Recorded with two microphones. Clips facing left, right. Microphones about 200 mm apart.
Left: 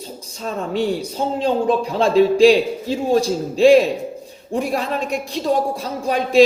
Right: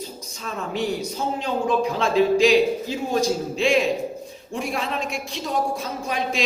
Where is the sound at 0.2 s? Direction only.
30° left (ahead or behind).